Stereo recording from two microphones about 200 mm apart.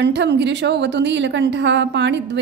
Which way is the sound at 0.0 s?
60° right (ahead or behind).